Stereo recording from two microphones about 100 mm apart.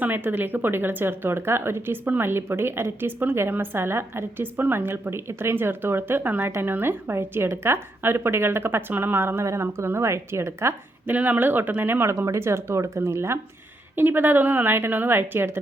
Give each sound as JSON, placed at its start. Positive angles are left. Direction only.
{"t": 0.0, "sound": "a woman's voice", "side_deg": -20}
{"t": 11.1, "sound": "a woman's voice", "side_deg": -15}